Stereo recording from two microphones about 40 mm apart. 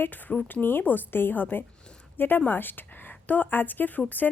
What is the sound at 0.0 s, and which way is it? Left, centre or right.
A woman's voice, left.